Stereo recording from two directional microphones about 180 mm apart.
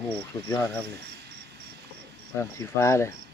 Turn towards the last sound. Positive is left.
turn(degrees=15)  # may be behind; listen again after turning